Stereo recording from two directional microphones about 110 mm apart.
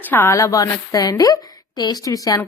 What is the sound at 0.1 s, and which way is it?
Speech, 15° left (ahead or behind).